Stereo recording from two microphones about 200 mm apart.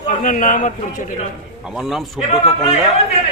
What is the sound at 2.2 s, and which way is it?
Speech, 30° left (ahead or behind).